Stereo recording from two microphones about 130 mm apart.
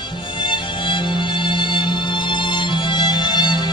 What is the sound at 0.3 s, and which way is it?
Music, 40° left (ahead or behind).